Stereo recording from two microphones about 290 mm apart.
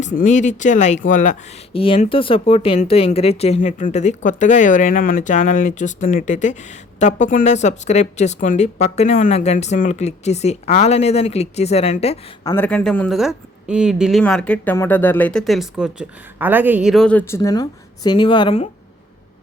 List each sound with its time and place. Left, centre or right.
0.0 s speech: left
12.5 s speech: centre